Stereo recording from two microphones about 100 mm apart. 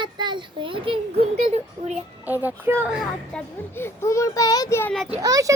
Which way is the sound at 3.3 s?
5° left (ahead or behind).